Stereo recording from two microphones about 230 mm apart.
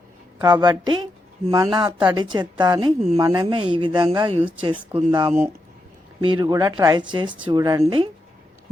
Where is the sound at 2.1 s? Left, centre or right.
Centre.